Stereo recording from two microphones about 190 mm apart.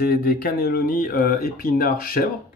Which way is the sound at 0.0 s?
50° left (ahead or behind).